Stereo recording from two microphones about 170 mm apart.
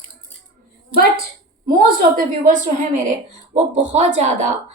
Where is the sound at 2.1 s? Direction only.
50° right (ahead or behind).